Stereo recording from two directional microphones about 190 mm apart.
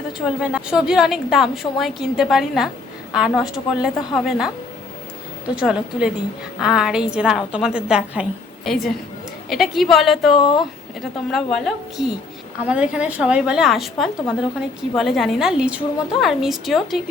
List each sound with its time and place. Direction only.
0.3 s a woman's voice: 5° right (ahead or behind)
5.5 s a woman's voice: 5° right (ahead or behind)
10.3 s speech: 25° left (ahead or behind)
11.3 s a woman's voice: centre (ahead or behind)